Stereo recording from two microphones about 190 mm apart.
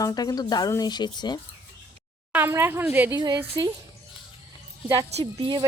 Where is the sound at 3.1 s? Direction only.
20° right (ahead or behind).